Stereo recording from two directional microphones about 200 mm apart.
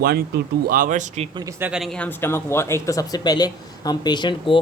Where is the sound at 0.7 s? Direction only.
40° right (ahead or behind).